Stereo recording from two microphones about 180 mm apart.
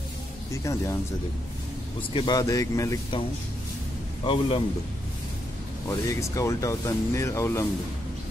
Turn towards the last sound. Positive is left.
turn(degrees=15)  # may be behind; listen again after turning